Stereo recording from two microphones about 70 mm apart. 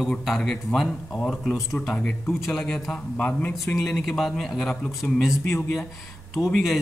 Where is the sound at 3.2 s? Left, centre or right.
Left.